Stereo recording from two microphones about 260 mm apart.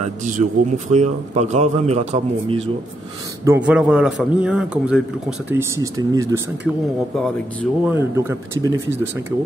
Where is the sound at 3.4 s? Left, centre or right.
Centre.